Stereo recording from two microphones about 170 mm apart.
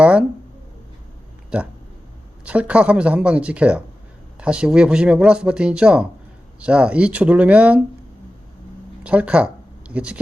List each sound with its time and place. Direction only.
0.0 s a sound: 5° right (ahead or behind)
1.5 s speech: 5° right (ahead or behind)
9.0 s speech: 5° right (ahead or behind)